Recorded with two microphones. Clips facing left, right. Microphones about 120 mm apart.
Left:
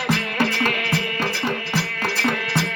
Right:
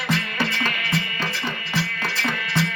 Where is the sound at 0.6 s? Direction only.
65° left (ahead or behind).